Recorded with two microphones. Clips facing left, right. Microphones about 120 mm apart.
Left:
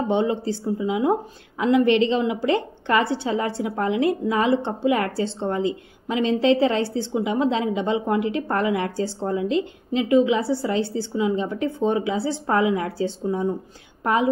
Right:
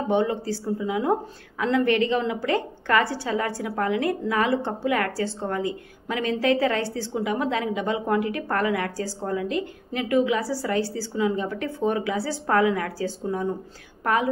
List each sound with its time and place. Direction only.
0.1 s a woman's voice: 20° left (ahead or behind)